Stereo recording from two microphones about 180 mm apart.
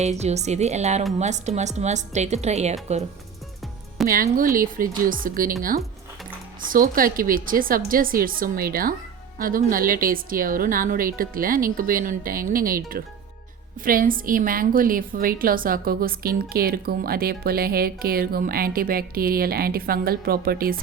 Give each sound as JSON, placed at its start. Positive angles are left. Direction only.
{"t": 0.0, "sound": "a woman's voice", "side_deg": -40}
{"t": 4.1, "sound": "a woman's voice", "side_deg": -50}
{"t": 6.7, "sound": "a woman's voice", "side_deg": -50}